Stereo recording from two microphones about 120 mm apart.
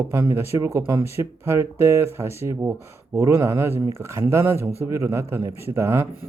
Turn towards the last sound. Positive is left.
turn(degrees=-20)  # may be behind; listen again after turning